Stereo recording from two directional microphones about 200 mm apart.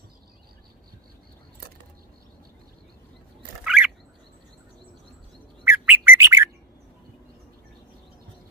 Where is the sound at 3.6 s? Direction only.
5° right (ahead or behind).